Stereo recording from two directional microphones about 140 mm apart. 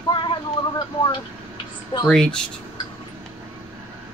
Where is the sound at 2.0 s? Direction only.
5° left (ahead or behind).